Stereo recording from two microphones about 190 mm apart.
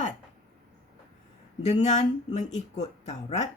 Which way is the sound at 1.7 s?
35° left (ahead or behind).